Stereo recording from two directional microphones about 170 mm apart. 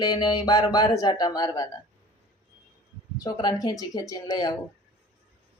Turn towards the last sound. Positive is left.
turn(degrees=25)  # may be behind; listen again after turning